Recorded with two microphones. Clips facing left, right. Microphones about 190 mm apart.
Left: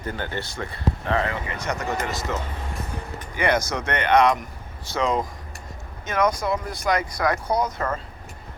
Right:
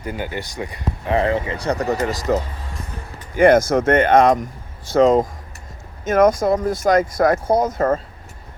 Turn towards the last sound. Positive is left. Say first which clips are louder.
# right 7 dB
turn(degrees=-50)  # may be behind; listen again after turning